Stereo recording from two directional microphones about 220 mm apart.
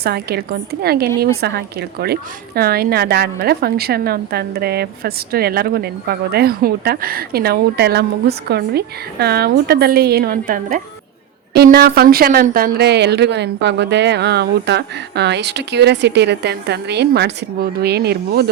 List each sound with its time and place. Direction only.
0.0 s a woman's voice: 45° right (ahead or behind)